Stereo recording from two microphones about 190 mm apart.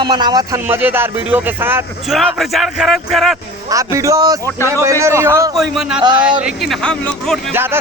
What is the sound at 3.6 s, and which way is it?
Speech, 15° right (ahead or behind).